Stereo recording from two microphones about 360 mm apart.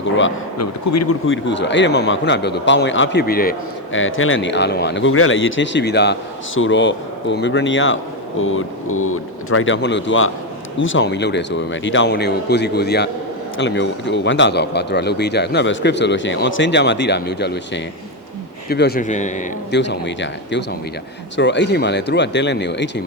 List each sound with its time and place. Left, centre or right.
0.0 s speech: left